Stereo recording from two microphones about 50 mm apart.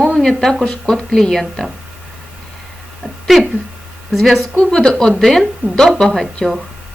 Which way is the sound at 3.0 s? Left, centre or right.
Centre.